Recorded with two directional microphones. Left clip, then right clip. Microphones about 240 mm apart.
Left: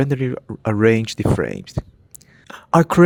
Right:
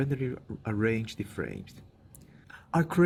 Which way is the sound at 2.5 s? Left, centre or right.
Left.